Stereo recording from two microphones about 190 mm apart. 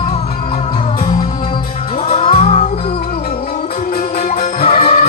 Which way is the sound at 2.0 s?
30° left (ahead or behind).